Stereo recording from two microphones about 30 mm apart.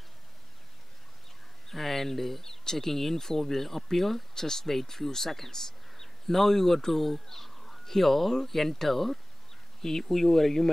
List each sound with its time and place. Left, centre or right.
1.7 s speech: centre
4.4 s a man's voice: centre